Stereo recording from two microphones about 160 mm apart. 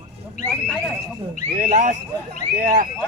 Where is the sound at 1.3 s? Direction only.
55° right (ahead or behind).